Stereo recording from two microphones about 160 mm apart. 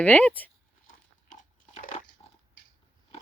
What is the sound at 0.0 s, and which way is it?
Speech, 10° left (ahead or behind).